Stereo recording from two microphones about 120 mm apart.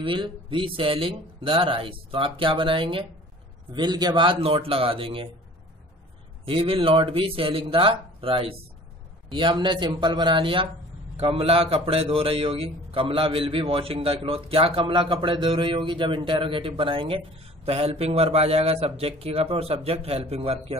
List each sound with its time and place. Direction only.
0.0 s a man's voice: 45° right (ahead or behind)
6.4 s a man's voice: 50° right (ahead or behind)
17.6 s a man's voice: 55° right (ahead or behind)